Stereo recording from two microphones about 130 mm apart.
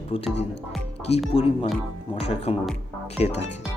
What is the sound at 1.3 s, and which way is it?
Speech, 45° left (ahead or behind).